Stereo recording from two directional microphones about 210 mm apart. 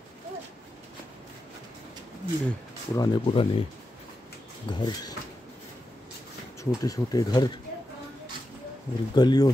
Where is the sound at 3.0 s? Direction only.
25° left (ahead or behind).